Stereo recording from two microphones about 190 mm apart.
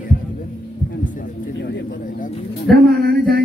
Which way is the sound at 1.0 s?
45° left (ahead or behind).